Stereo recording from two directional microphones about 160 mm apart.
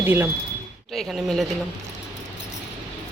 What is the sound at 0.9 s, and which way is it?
Speech, centre (ahead or behind).